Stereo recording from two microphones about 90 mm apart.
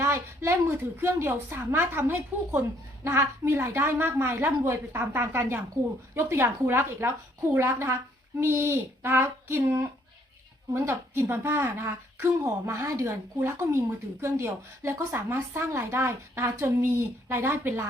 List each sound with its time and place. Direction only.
0.0 s a woman's voice: 30° right (ahead or behind)